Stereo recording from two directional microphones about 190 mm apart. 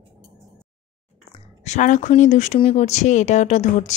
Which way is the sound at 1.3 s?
40° left (ahead or behind).